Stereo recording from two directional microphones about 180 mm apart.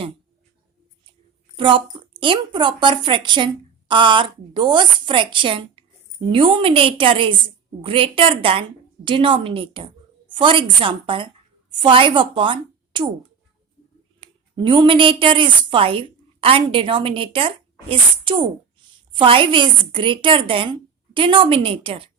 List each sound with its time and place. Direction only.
1.5 s a woman's voice: 30° right (ahead or behind)
14.2 s a woman's voice: 25° right (ahead or behind)